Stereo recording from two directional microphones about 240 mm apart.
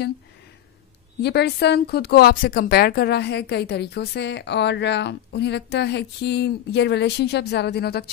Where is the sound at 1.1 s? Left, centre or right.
Left.